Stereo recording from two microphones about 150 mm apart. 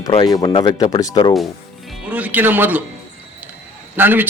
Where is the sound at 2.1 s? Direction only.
10° right (ahead or behind).